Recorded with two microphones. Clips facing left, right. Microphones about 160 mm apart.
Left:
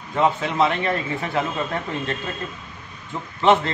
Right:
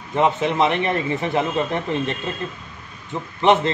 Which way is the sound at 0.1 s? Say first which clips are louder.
Right 2 dB; 20° right (ahead or behind).